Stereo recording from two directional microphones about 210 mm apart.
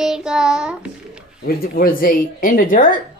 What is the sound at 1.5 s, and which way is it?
Speech, 45° left (ahead or behind).